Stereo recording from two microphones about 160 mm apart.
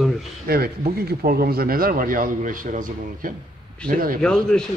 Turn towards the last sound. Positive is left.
turn(degrees=5)  # may be behind; listen again after turning